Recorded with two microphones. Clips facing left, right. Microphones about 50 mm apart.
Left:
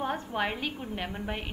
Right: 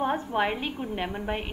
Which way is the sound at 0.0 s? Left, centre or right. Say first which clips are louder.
Right 5 dB; centre.